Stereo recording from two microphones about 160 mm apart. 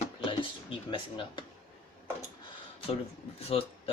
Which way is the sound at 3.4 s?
40° left (ahead or behind).